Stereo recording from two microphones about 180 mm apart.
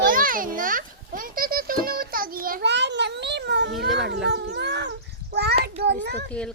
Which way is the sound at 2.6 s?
75° right (ahead or behind).